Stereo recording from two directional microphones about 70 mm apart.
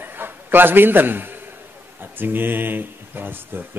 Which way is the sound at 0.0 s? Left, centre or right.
Right.